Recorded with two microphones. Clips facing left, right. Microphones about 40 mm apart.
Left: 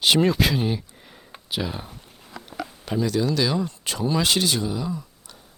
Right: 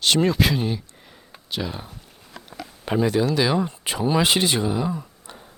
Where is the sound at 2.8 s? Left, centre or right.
Right.